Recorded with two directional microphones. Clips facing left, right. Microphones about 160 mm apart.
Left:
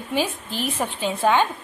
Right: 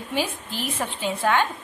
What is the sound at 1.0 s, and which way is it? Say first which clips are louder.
Speech: left 3 dB; 20° left (ahead or behind).